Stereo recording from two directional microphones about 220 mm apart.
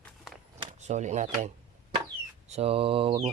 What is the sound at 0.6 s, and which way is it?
Speech, 30° right (ahead or behind).